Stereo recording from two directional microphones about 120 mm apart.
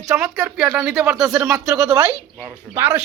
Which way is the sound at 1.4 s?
20° right (ahead or behind).